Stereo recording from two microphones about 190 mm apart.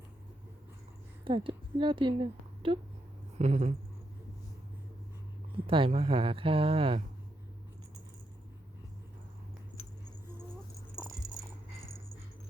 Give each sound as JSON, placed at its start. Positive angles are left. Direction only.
{"t": 1.2, "sound": "speech", "side_deg": -25}
{"t": 5.6, "sound": "speech", "side_deg": -30}